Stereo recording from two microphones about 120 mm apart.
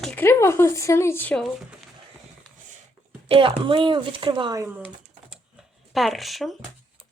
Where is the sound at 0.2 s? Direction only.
20° left (ahead or behind).